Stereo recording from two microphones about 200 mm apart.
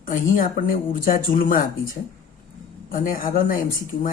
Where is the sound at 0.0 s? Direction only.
40° left (ahead or behind).